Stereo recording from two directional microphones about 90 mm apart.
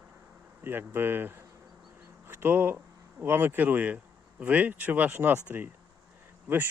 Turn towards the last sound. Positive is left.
turn(degrees=-20)  # may be behind; listen again after turning